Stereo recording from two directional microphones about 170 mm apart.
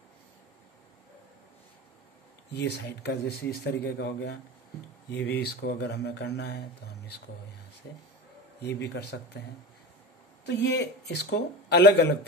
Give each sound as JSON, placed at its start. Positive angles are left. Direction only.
{"t": 2.5, "sound": "speech", "side_deg": 80}
{"t": 8.6, "sound": "speech", "side_deg": 85}
{"t": 10.4, "sound": "speech", "side_deg": 90}